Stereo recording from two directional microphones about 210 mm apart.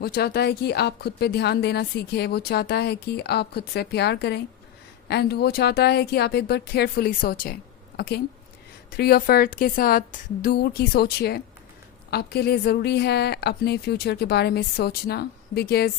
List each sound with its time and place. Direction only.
0.0 s speech: 50° left (ahead or behind)